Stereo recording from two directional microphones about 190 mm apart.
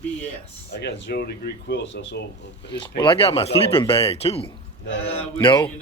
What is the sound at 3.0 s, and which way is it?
Speech, 25° left (ahead or behind).